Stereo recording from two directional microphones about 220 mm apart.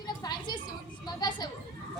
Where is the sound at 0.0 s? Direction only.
20° left (ahead or behind).